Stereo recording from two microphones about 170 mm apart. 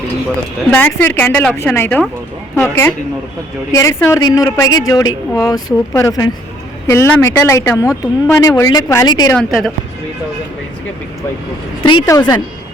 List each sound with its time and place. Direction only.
0.7 s a woman's voice: 10° left (ahead or behind)
9.3 s a woman's voice: 5° left (ahead or behind)
12.0 s a woman's voice: 20° left (ahead or behind)